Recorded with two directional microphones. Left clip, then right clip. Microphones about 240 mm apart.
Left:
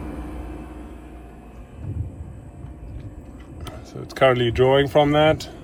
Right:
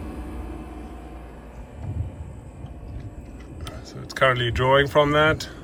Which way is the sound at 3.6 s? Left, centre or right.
Centre.